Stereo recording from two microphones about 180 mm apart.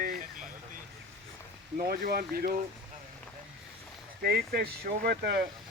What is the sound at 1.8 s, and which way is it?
Speech, 55° right (ahead or behind).